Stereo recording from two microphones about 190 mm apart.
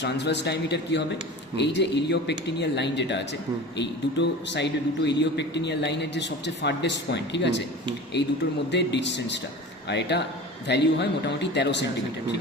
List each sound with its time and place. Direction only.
0.0 s a man's voice: 65° left (ahead or behind)
8.7 s a man's voice: 65° left (ahead or behind)